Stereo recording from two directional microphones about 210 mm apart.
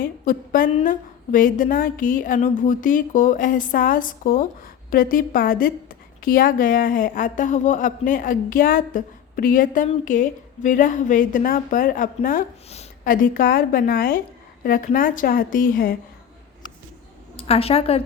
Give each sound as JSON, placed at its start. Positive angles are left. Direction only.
{"t": 0.0, "sound": "a woman's voice", "side_deg": 40}
{"t": 17.3, "sound": "a woman's voice", "side_deg": 25}